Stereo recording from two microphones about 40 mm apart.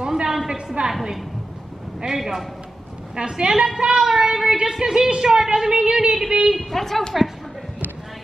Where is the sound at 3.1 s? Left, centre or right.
Right.